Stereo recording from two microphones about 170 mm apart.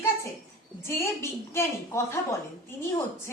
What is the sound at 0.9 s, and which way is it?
A woman's voice, 15° left (ahead or behind).